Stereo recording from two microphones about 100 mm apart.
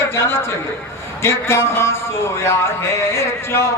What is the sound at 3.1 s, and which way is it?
Speech, 25° left (ahead or behind).